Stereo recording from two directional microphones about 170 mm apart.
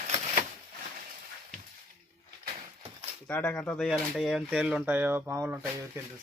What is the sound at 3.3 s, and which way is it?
Speech, 10° left (ahead or behind).